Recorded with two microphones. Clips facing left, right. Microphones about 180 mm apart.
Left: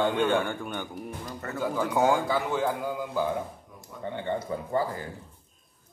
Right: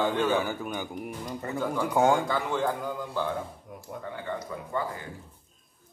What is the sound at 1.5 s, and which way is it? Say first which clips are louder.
A man's voice: even; 5° left (ahead or behind).